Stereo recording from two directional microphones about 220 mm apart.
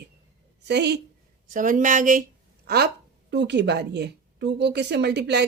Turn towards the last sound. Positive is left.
turn(degrees=-50)  # may be behind; listen again after turning